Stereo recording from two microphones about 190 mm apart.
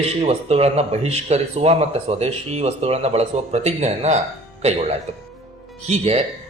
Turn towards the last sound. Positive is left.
turn(degrees=-35)  # may be behind; listen again after turning